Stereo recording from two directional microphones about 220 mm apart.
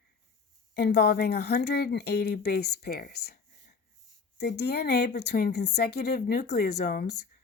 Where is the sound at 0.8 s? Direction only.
50° left (ahead or behind).